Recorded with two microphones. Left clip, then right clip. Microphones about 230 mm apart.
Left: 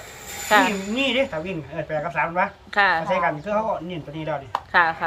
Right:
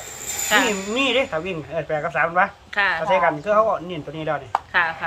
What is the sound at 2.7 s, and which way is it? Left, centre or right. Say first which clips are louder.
Speech: left 2 dB; left.